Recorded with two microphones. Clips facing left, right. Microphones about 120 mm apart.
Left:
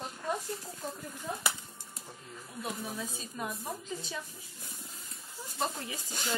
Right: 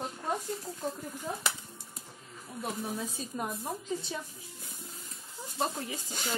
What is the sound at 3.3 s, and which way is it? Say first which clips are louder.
Speech: right 2 dB; 25° right (ahead or behind).